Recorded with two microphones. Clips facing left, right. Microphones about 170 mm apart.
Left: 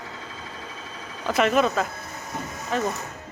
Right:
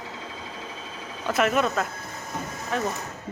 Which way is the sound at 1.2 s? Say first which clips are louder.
Left 2 dB; centre (ahead or behind).